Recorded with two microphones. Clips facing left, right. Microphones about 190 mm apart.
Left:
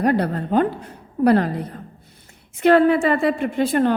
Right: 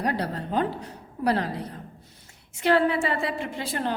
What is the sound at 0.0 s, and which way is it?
A woman's voice, 55° left (ahead or behind).